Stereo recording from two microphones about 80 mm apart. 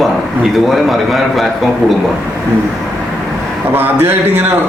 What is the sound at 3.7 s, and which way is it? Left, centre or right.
Speech, right.